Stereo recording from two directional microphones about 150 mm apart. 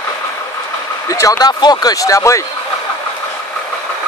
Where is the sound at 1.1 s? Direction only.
20° left (ahead or behind).